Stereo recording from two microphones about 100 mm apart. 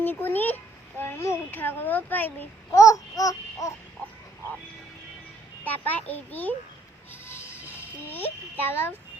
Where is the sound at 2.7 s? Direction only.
35° left (ahead or behind).